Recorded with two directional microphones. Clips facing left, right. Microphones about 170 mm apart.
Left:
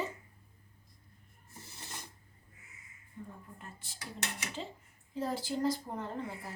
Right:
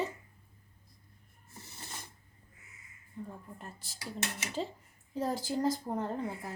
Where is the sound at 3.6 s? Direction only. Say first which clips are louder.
Right 3 dB; 40° right (ahead or behind).